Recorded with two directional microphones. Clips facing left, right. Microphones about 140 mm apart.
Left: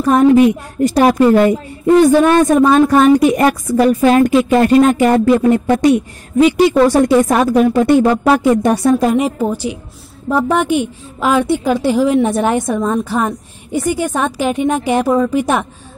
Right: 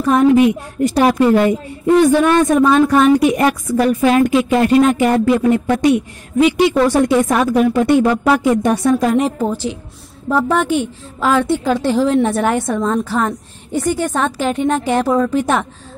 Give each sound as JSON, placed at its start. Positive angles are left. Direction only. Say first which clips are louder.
{"t": 0.0, "sound": "a woman's voice", "louder": "left 2 dB", "side_deg": 40}
{"t": 9.0, "sound": "a woman's voice", "louder": "left 1 dB", "side_deg": 10}